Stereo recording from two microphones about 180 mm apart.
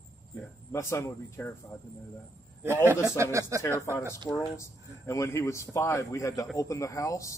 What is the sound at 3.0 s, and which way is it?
Speech, 15° right (ahead or behind).